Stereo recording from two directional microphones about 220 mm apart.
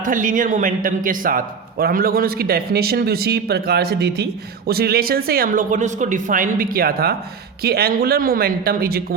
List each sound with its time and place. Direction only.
0.0 s a man's voice: 35° right (ahead or behind)